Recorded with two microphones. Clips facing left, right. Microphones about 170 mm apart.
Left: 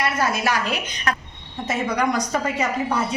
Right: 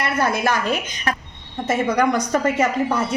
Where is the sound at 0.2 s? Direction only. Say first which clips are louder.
Right 2 dB; 55° right (ahead or behind).